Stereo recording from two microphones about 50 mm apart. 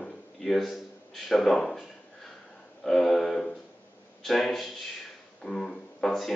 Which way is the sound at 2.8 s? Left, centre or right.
Centre.